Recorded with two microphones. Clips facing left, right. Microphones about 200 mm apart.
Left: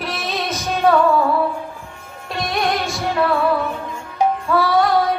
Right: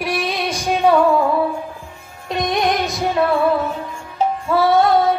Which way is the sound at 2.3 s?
20° right (ahead or behind).